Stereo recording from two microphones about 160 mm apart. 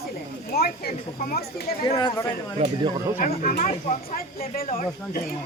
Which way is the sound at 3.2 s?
55° left (ahead or behind).